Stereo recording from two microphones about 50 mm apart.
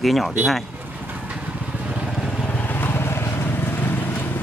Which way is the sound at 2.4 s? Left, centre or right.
Left.